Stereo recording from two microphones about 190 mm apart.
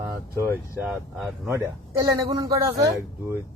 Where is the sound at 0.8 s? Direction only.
5° right (ahead or behind).